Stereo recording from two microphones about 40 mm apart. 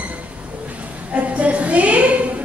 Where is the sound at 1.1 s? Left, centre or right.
Right.